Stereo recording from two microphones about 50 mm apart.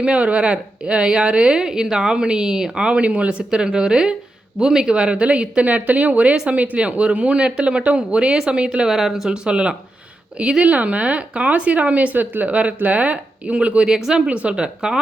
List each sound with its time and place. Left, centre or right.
0.0 s a woman's voice: right
5.6 s speech: right
8.9 s a woman's voice: centre
9.4 s speech: right
13.8 s a woman's voice: centre
14.3 s speech: right